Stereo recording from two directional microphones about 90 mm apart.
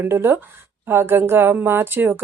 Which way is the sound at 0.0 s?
25° right (ahead or behind).